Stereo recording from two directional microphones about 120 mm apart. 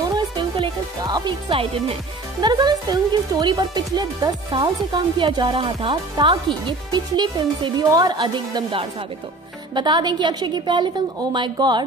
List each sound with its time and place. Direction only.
0.1 s music: 40° right (ahead or behind)
1.5 s speech: 55° right (ahead or behind)
2.4 s speech: 35° right (ahead or behind)
6.2 s speech: 35° right (ahead or behind)